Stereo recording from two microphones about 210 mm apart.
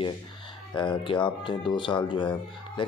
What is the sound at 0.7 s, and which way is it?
Speech, 25° left (ahead or behind).